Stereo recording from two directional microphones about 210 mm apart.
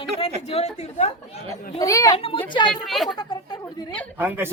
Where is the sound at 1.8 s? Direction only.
15° left (ahead or behind).